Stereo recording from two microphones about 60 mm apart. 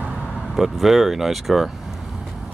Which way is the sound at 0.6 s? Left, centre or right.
Centre.